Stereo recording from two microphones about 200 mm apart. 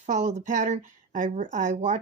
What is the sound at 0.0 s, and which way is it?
Speech, 35° right (ahead or behind).